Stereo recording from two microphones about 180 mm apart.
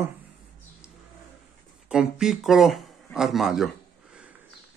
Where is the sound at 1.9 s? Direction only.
5° right (ahead or behind).